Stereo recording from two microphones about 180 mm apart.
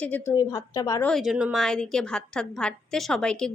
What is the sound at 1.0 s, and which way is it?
A woman's voice, centre (ahead or behind).